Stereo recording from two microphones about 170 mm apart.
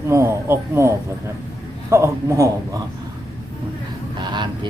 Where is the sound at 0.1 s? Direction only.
15° right (ahead or behind).